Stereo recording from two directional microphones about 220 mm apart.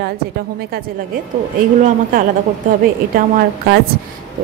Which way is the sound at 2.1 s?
40° right (ahead or behind).